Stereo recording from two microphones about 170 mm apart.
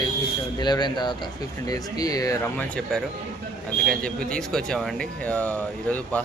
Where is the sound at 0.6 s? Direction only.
25° left (ahead or behind); by 3.0 s 5° left (ahead or behind).